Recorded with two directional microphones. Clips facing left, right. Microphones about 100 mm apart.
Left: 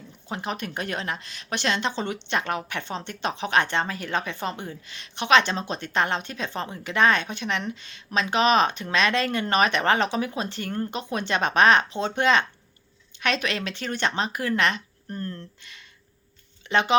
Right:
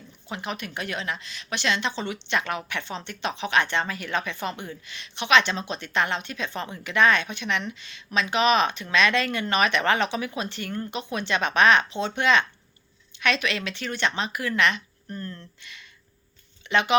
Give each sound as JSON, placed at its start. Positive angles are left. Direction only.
{"t": 0.3, "sound": "a woman's voice", "side_deg": 40}